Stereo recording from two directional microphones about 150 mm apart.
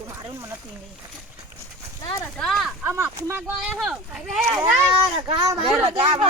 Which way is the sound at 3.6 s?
Centre (ahead or behind).